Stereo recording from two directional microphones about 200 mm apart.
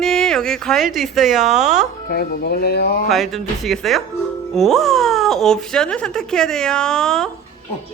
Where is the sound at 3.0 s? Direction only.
Centre (ahead or behind).